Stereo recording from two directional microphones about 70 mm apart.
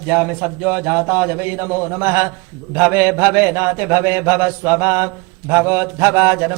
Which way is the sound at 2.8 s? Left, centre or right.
Right.